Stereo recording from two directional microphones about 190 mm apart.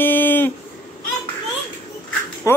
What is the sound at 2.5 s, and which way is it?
Speech, 15° left (ahead or behind).